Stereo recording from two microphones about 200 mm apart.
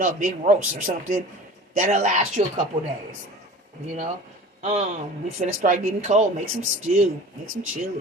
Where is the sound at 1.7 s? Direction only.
40° right (ahead or behind).